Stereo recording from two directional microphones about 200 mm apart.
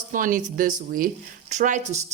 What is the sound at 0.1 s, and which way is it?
A woman's voice, 40° right (ahead or behind).